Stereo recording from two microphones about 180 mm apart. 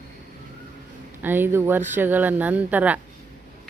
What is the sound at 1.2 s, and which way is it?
Speech, 10° right (ahead or behind).